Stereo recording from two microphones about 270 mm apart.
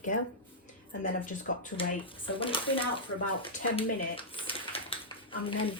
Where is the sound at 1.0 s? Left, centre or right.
Left.